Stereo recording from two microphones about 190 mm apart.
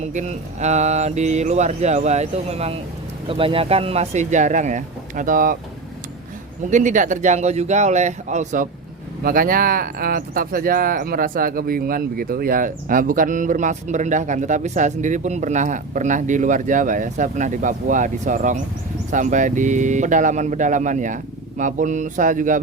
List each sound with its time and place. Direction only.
0.0 s speech: 40° right (ahead or behind)
6.7 s speech: 40° right (ahead or behind)
9.2 s speech: 50° right (ahead or behind)